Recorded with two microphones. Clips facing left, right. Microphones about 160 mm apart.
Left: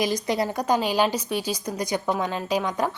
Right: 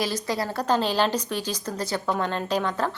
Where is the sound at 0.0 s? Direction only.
20° left (ahead or behind).